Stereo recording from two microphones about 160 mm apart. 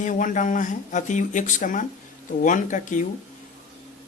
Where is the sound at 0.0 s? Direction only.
55° left (ahead or behind).